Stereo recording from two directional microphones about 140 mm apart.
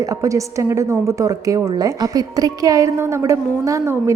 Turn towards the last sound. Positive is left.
turn(degrees=-20)  # may be behind; listen again after turning